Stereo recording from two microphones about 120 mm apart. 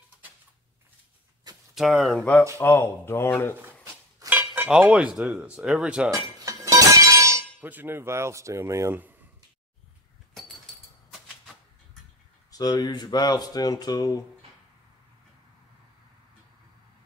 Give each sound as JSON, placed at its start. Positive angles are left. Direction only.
{"t": 1.8, "sound": "speech", "side_deg": 0}
{"t": 2.6, "sound": "speech", "side_deg": 20}
{"t": 3.6, "sound": "a sound", "side_deg": -20}
{"t": 4.7, "sound": "speech", "side_deg": -5}
{"t": 6.4, "sound": "a sound", "side_deg": -25}
{"t": 7.6, "sound": "speech", "side_deg": -15}
{"t": 12.4, "sound": "speech", "side_deg": 35}